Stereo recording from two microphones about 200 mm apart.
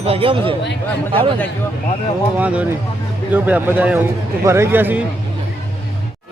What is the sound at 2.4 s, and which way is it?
A man's voice, 5° right (ahead or behind).